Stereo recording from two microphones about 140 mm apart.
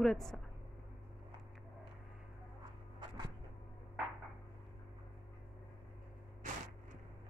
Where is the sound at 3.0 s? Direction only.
30° right (ahead or behind).